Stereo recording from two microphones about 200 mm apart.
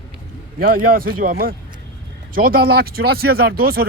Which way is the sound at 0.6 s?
45° right (ahead or behind).